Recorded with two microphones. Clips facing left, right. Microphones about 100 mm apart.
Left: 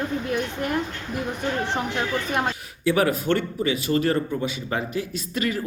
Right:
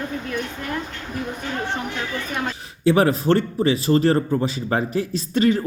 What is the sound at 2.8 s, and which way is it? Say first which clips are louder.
A man's voice: right 4 dB; 30° right (ahead or behind).